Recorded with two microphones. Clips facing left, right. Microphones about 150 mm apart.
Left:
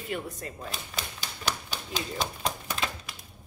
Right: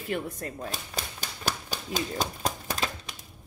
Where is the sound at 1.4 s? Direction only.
45° right (ahead or behind).